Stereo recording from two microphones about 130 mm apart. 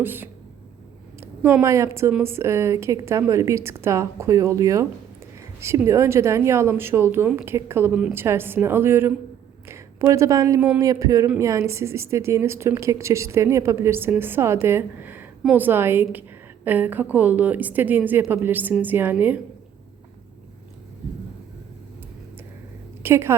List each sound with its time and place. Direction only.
0.0 s a woman's voice: 15° right (ahead or behind)
1.2 s a sound: 20° right (ahead or behind)
1.6 s a woman's voice: 20° right (ahead or behind)
7.3 s a woman's voice: 10° right (ahead or behind)
9.6 s a sound: 20° right (ahead or behind)
10.8 s a woman's voice: 25° right (ahead or behind)
23.0 s a woman's voice: 20° right (ahead or behind)